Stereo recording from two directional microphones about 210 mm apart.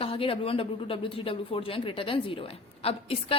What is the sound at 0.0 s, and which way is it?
Speech, 25° left (ahead or behind).